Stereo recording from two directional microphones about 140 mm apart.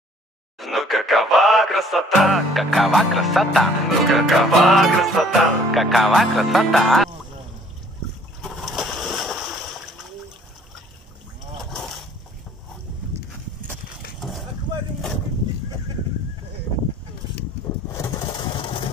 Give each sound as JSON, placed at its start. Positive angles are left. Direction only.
{"t": 0.6, "sound": "speech", "side_deg": 0}
{"t": 8.4, "sound": "a sound", "side_deg": 0}
{"t": 11.7, "sound": "boat", "side_deg": 0}
{"t": 17.9, "sound": "vehicle", "side_deg": 25}